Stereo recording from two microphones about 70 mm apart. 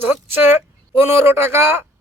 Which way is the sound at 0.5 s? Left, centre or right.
Right.